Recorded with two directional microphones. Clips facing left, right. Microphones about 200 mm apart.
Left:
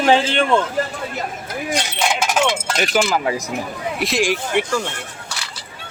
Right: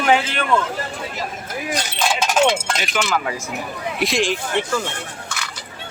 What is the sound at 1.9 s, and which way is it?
Speech, 15° left (ahead or behind).